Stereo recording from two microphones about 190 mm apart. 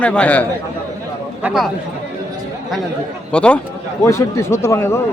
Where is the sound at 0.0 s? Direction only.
5° left (ahead or behind).